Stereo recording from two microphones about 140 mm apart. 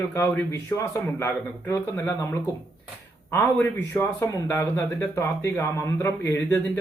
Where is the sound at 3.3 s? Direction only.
15° left (ahead or behind).